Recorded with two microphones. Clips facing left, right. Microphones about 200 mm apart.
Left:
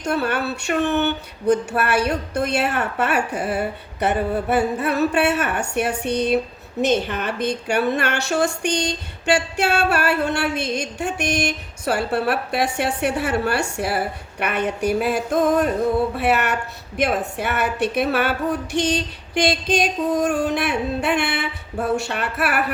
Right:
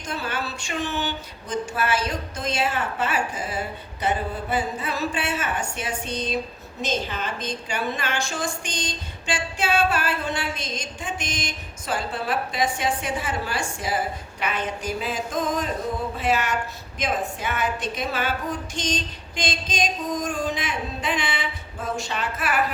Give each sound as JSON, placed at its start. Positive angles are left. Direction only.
{"t": 0.0, "sound": "a woman's voice", "side_deg": 65}